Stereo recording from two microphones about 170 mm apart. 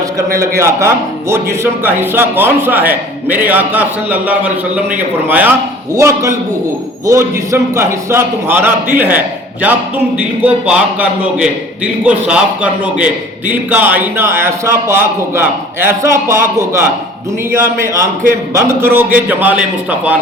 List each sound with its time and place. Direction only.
0.2 s a man's voice: 20° right (ahead or behind)